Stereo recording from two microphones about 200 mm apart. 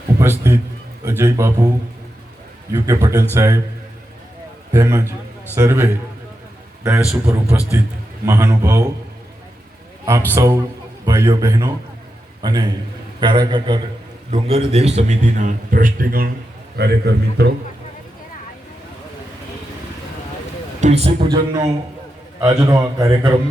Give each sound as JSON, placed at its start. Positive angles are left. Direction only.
{"t": 0.2, "sound": "a man's voice", "side_deg": -10}
{"t": 2.7, "sound": "a man's voice", "side_deg": -15}
{"t": 4.7, "sound": "a man's voice", "side_deg": -15}
{"t": 10.1, "sound": "a man's voice", "side_deg": -15}
{"t": 20.8, "sound": "a man's voice", "side_deg": -30}